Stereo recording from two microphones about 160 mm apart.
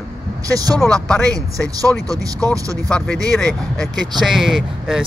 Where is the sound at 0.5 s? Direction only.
20° right (ahead or behind).